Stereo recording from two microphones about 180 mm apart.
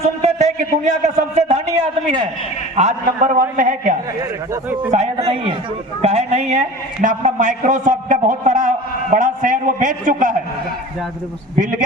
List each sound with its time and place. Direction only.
0.0 s a man's voice: 35° right (ahead or behind)
2.7 s a man's voice: 40° right (ahead or behind)
4.9 s a man's voice: 35° right (ahead or behind)